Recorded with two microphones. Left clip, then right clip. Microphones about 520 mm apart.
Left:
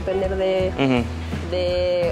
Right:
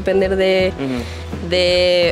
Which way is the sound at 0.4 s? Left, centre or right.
Right.